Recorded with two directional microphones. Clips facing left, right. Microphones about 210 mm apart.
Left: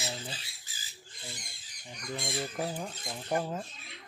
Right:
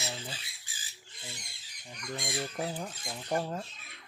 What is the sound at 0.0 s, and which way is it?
Squawk, 15° left (ahead or behind).